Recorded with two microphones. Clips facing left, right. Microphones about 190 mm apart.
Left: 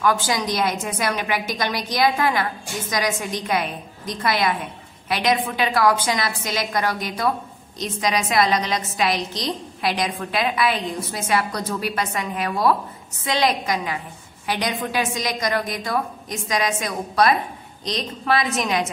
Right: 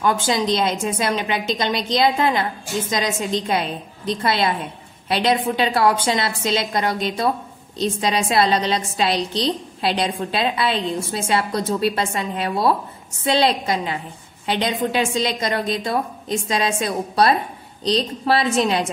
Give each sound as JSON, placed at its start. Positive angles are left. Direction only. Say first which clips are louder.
{"t": 0.0, "sound": "a woman's voice", "louder": "right 2 dB", "side_deg": -25}